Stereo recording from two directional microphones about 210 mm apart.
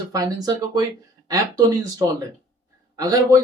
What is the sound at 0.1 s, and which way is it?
Speech, 15° right (ahead or behind).